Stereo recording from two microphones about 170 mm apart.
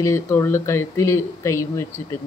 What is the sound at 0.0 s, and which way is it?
Speech, 15° left (ahead or behind).